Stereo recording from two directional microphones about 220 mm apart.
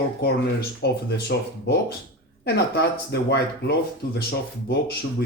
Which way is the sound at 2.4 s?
50° left (ahead or behind).